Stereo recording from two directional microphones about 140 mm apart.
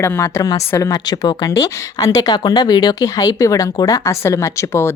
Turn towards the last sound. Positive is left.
turn(degrees=20)  # may be behind; listen again after turning